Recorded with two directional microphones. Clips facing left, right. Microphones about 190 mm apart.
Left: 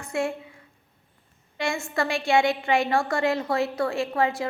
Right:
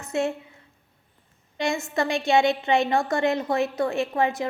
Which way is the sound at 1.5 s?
20° right (ahead or behind).